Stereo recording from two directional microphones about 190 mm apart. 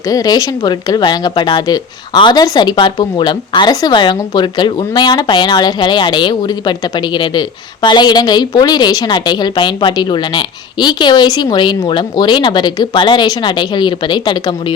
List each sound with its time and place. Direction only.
0.1 s a woman's voice: 20° left (ahead or behind)